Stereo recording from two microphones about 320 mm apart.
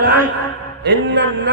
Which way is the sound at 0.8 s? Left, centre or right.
Right.